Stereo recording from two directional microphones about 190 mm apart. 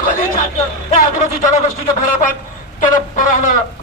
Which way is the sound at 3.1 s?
40° left (ahead or behind).